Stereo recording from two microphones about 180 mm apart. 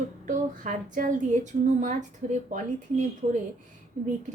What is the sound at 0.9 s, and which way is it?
A woman's voice, 45° right (ahead or behind).